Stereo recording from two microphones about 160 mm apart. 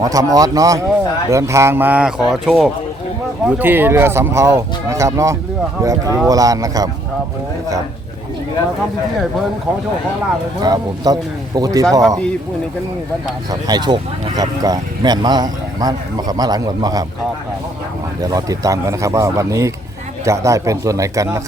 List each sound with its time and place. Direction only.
0.0 s speech: 20° right (ahead or behind); by 2.6 s centre (ahead or behind)
3.4 s speech: 10° right (ahead or behind)
10.6 s speech: 25° right (ahead or behind)
13.5 s speech: 25° right (ahead or behind)
18.2 s speech: 20° right (ahead or behind)